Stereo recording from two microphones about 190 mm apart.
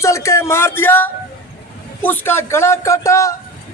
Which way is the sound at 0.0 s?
15° left (ahead or behind).